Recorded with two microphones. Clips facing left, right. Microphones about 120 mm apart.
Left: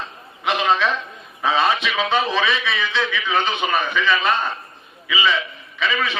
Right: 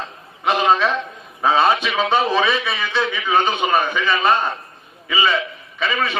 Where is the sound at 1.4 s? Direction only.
35° right (ahead or behind).